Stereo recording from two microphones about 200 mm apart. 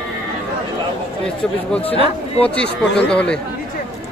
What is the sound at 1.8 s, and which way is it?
Speech, 30° left (ahead or behind).